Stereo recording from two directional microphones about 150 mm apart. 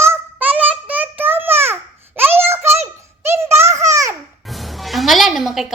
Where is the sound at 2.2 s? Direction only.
15° right (ahead or behind).